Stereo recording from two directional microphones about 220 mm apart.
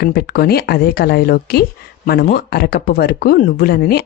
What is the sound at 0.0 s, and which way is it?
Speech, 45° left (ahead or behind).